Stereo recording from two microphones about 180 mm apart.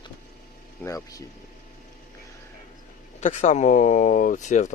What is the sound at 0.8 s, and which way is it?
Speech, 20° left (ahead or behind).